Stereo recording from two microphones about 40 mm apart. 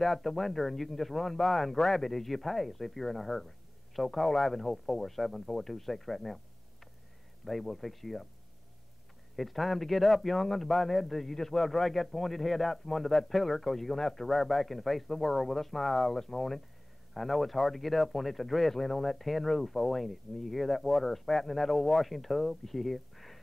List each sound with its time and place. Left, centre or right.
0.0 s a man's voice: centre
9.4 s a man's voice: centre